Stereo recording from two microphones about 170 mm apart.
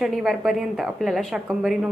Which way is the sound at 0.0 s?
Centre (ahead or behind).